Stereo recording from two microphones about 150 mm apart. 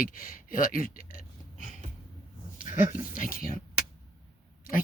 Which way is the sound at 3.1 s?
65° left (ahead or behind).